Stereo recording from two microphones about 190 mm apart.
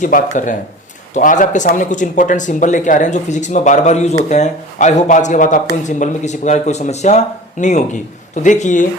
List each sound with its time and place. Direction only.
0.0 s speech: 40° left (ahead or behind)